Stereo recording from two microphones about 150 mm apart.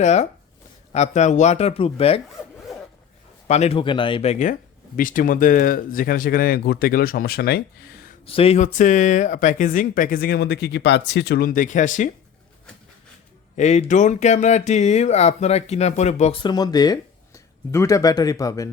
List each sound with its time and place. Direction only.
0.0 s speech: 50° left (ahead or behind)
2.7 s zipper: centre (ahead or behind)
3.4 s speech: 45° left (ahead or behind)
4.9 s speech: 65° left (ahead or behind); by 7.6 s 90° left
8.3 s speech: 40° left (ahead or behind); by 12.1 s 55° left (ahead or behind)
13.6 s speech: 50° left (ahead or behind)
16.4 s speech: 30° left (ahead or behind)